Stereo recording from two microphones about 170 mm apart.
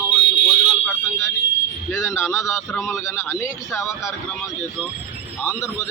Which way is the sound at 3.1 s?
15° left (ahead or behind).